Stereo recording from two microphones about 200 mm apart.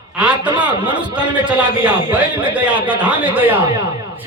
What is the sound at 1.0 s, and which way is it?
A man's voice, 5° right (ahead or behind).